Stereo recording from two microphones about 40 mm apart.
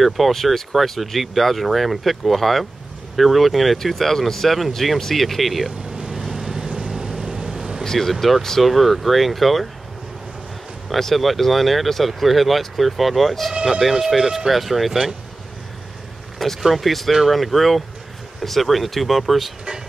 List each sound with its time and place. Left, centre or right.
0.0 s speech: centre
5.9 s vehicle: centre
7.8 s speech: centre
10.9 s speech: centre
13.7 s speech: centre
16.6 s speech: centre